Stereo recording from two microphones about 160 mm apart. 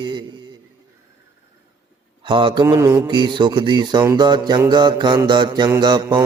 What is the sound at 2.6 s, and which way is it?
Speech, 20° right (ahead or behind).